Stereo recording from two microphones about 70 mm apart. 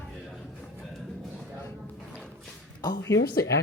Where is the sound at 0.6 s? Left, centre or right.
Centre.